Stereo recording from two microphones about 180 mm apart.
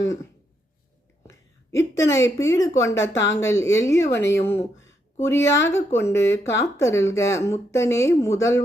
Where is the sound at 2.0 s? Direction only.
15° left (ahead or behind).